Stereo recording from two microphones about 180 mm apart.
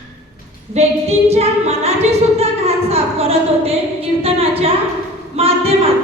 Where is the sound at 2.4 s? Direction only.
35° right (ahead or behind).